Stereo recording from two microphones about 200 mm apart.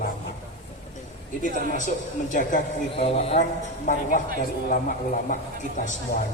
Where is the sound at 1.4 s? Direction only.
40° left (ahead or behind).